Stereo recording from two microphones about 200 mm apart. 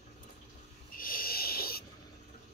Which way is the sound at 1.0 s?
45° left (ahead or behind).